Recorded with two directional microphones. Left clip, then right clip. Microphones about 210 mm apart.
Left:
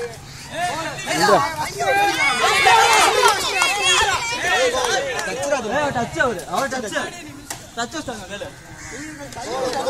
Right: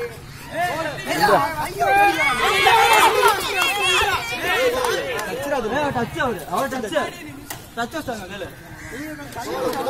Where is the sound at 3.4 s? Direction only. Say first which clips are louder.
Left 2 dB; 20° right (ahead or behind); by 4.8 s 40° right (ahead or behind).